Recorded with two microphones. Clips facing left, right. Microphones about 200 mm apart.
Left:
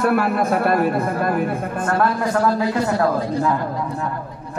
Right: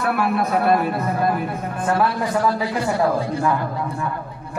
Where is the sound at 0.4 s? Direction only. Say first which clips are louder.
Left 1 dB; 50° left (ahead or behind).